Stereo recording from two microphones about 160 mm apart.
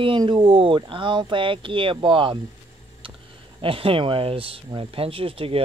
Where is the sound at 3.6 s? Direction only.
35° right (ahead or behind).